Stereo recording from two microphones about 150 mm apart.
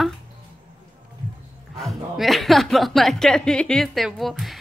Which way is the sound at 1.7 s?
Centre (ahead or behind).